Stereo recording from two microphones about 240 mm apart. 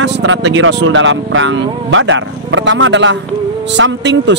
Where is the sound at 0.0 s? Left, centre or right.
Right.